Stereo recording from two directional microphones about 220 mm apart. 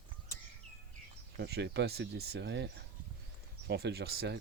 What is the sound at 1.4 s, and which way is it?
Speech, 50° right (ahead or behind).